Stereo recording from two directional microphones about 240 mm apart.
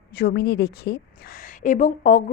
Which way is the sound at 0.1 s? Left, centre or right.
Left.